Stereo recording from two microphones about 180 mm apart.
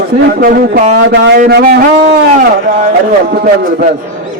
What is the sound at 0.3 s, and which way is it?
Speech, 55° right (ahead or behind).